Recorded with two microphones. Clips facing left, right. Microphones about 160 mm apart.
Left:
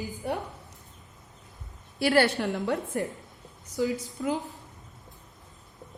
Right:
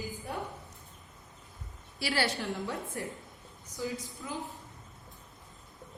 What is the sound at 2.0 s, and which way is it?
A woman's voice, 55° left (ahead or behind).